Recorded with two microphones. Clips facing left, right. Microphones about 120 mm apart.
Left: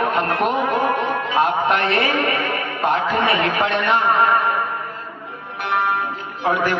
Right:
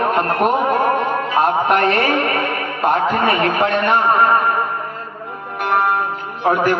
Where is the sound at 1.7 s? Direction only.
45° right (ahead or behind).